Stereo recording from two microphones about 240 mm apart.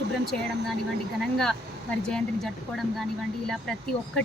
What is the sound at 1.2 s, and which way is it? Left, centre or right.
A woman's voice, centre.